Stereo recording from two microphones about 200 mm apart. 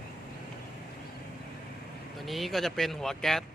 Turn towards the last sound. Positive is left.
turn(degrees=0)  # may be behind; listen again after turning